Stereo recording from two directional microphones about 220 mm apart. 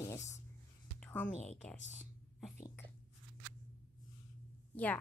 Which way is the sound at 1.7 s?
35° left (ahead or behind).